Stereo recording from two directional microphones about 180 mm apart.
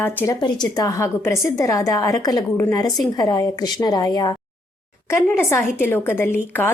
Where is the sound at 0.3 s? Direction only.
25° left (ahead or behind).